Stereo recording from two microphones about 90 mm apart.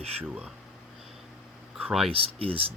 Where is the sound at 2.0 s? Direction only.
90° right.